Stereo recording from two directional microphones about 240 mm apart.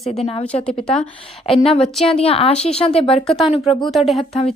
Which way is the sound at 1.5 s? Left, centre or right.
Left.